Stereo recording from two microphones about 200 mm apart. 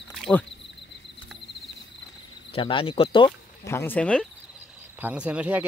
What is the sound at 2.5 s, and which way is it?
Speech, 25° left (ahead or behind).